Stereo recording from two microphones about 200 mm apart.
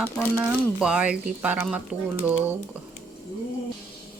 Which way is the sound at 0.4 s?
5° right (ahead or behind).